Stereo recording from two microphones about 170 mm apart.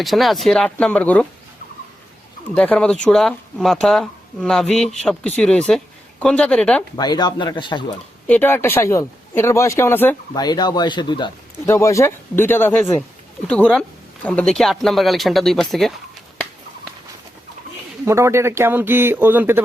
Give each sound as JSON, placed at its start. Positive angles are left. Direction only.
{"t": 0.0, "sound": "speech", "side_deg": 0}
{"t": 2.6, "sound": "speech", "side_deg": 5}
{"t": 6.9, "sound": "a man's voice", "side_deg": 25}
{"t": 8.3, "sound": "speech", "side_deg": 10}
{"t": 10.3, "sound": "a man's voice", "side_deg": 25}
{"t": 18.0, "sound": "speech", "side_deg": -15}